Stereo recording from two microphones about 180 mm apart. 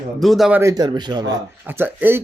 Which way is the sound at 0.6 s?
20° right (ahead or behind).